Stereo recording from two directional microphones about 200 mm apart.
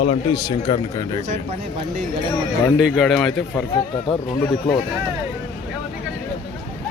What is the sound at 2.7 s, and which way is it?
Speech, centre (ahead or behind).